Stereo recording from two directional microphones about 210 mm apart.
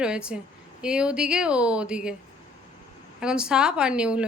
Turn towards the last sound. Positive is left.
turn(degrees=-5)  # may be behind; listen again after turning